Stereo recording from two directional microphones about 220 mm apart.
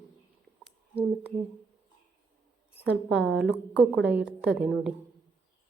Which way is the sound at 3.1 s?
5° right (ahead or behind).